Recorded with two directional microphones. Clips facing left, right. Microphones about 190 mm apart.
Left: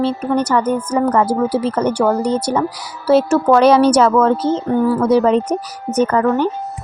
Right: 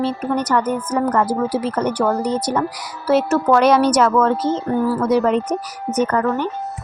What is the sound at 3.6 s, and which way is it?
A woman's voice, 30° left (ahead or behind).